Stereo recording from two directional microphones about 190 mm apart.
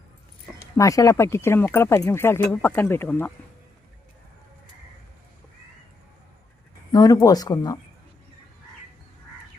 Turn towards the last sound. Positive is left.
turn(degrees=20)  # may be behind; listen again after turning